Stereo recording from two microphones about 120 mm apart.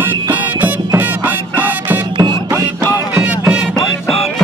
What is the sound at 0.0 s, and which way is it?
Music, 15° right (ahead or behind).